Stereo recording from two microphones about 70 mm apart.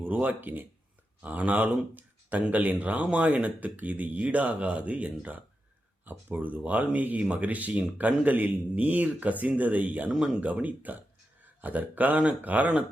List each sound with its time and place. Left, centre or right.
0.0 s speech: right
10.1 s speech: centre
10.4 s speech: right